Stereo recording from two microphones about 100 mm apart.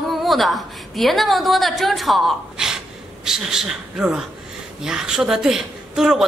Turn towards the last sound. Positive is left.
turn(degrees=-5)  # may be behind; listen again after turning